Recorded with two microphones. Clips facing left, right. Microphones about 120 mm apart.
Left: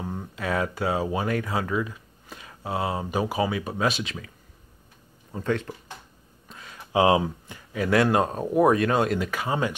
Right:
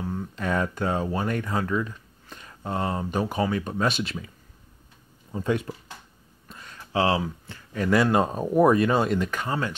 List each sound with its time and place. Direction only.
0.0 s a sound: 15° left (ahead or behind)
0.4 s speech: 5° left (ahead or behind)
5.3 s speech: 10° right (ahead or behind)
6.5 s a sound: centre (ahead or behind)
6.8 s speech: 15° left (ahead or behind)
7.7 s speech: 5° left (ahead or behind)